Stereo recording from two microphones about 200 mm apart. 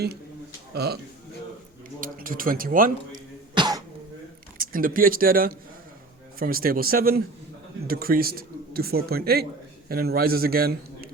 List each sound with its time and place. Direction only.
0.7 s a man's voice: 55° right (ahead or behind)
2.0 s a woman's voice: 45° right (ahead or behind)
3.5 s throat clearing: 20° right (ahead or behind)
4.5 s a woman's voice: 45° right (ahead or behind)